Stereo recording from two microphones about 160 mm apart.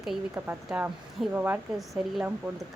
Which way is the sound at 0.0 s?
5° right (ahead or behind).